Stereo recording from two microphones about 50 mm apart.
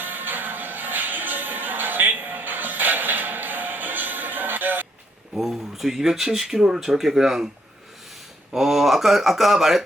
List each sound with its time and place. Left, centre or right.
0.0 s music: right
5.4 s speech: centre
8.5 s speech: centre